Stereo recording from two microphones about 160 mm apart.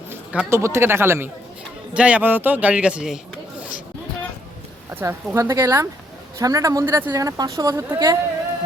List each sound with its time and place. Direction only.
0.1 s speech: 15° right (ahead or behind)
4.9 s speech: 15° right (ahead or behind)